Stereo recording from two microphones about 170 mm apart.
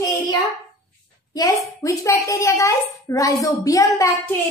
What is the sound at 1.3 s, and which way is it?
A woman's voice, 20° left (ahead or behind).